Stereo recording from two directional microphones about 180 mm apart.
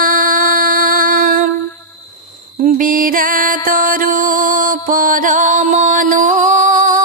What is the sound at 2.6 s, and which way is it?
Music, 50° right (ahead or behind).